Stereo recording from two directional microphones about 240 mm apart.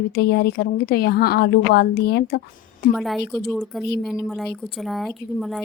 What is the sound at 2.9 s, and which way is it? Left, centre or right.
A woman's voice, centre.